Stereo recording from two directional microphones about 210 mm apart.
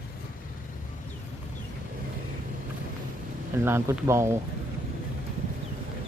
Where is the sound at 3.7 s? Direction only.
10° right (ahead or behind).